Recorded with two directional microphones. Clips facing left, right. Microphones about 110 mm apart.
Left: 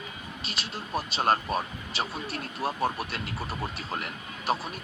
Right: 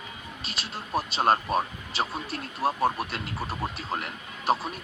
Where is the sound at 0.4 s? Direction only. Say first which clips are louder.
Even; 30° right (ahead or behind).